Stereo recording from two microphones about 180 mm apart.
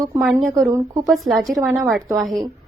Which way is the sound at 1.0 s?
Centre (ahead or behind).